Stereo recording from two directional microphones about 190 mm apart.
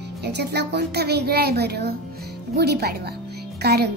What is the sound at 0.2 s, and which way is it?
A child's voice, 60° right (ahead or behind).